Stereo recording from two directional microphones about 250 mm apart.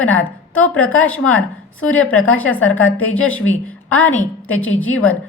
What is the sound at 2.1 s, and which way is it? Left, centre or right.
A woman's voice, left.